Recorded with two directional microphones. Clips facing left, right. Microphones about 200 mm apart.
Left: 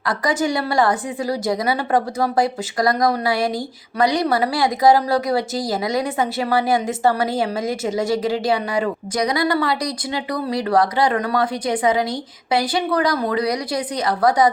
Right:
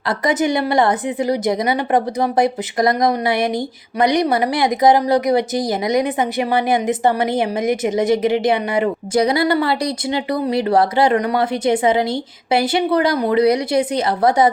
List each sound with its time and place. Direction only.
0.3 s a woman's voice: 20° right (ahead or behind)